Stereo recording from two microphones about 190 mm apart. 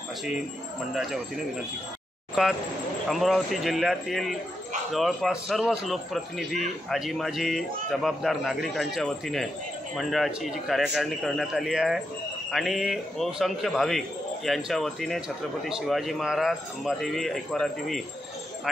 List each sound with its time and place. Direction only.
2.4 s a man's voice: 5° right (ahead or behind)